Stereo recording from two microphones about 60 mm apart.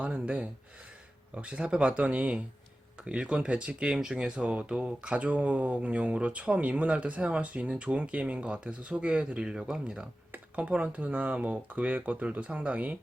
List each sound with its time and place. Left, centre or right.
0.0 s speech: right